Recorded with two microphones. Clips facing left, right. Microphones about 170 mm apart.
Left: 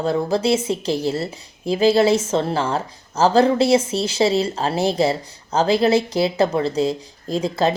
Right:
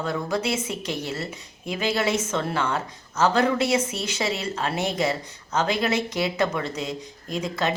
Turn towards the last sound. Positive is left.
turn(degrees=30)  # may be behind; listen again after turning